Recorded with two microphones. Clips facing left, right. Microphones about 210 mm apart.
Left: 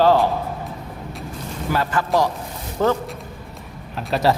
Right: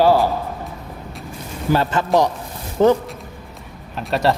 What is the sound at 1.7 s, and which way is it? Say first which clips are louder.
A man's voice: right 4 dB; 25° right (ahead or behind).